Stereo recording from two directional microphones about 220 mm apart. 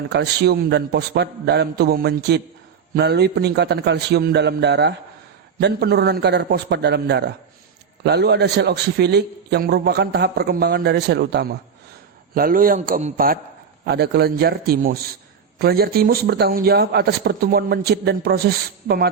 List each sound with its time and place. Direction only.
0.1 s a man's voice: 50° right (ahead or behind)